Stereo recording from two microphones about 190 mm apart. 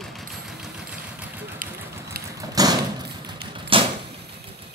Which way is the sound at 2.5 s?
20° right (ahead or behind).